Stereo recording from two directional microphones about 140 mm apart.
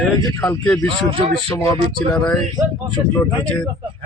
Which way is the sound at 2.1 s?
5° left (ahead or behind).